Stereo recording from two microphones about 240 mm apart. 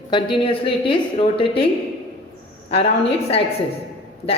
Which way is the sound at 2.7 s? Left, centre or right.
Left.